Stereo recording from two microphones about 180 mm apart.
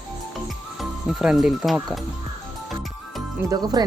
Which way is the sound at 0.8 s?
Centre (ahead or behind).